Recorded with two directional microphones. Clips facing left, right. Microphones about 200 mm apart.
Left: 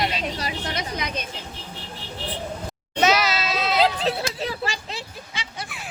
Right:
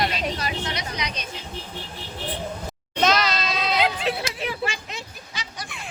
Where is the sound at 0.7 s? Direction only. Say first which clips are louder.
Left 2 dB; 50° left (ahead or behind).